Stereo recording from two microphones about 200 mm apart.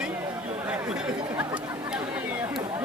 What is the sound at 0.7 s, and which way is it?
Chatter, 5° right (ahead or behind).